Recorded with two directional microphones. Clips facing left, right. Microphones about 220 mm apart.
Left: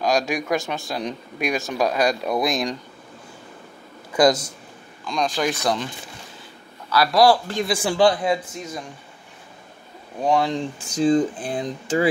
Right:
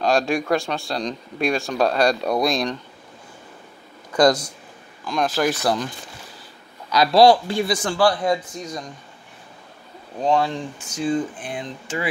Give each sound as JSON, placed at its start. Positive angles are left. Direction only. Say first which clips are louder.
{"t": 0.3, "sound": "speech", "louder": "right 2 dB", "side_deg": 15}
{"t": 2.2, "sound": "speech", "louder": "right 2 dB", "side_deg": 0}
{"t": 2.5, "sound": "speech", "louder": "right 1 dB", "side_deg": 10}
{"t": 4.1, "sound": "speech", "louder": "right 1 dB", "side_deg": 5}
{"t": 6.9, "sound": "speech", "louder": "right 3 dB", "side_deg": -25}
{"t": 7.6, "sound": "speech", "louder": "even", "side_deg": 5}
{"t": 7.9, "sound": "a man's voice", "louder": "left 3 dB", "side_deg": 20}
{"t": 8.3, "sound": "speech", "louder": "right 1 dB", "side_deg": 5}
{"t": 10.2, "sound": "speech", "louder": "even", "side_deg": 15}
{"t": 10.8, "sound": "speech", "louder": "left 5 dB", "side_deg": 35}